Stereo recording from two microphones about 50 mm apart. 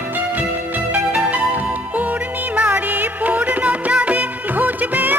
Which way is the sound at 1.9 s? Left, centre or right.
Right.